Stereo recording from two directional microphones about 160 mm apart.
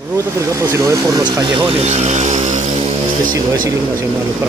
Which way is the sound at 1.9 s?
45° right (ahead or behind).